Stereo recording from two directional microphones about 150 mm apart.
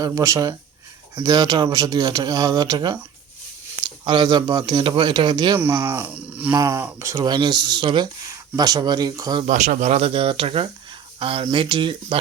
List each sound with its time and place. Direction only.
0.0 s speech: 20° right (ahead or behind)
5.7 s speech: 15° right (ahead or behind)
6.6 s speech: 25° right (ahead or behind)
9.5 s speech: 60° right (ahead or behind); by 12.2 s 35° right (ahead or behind)